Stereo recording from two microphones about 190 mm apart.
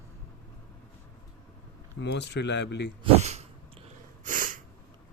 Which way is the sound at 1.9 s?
65° left (ahead or behind).